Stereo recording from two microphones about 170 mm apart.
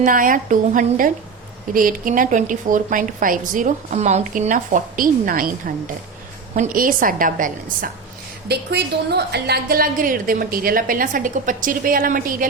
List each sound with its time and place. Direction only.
0.0 s a woman's voice: 50° right (ahead or behind)
8.4 s a woman's voice: 75° right (ahead or behind); by 12.5 s 55° right (ahead or behind)